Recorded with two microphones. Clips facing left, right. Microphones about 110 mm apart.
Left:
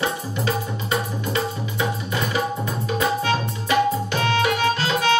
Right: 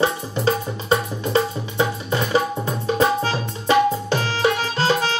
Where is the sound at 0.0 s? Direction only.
30° right (ahead or behind).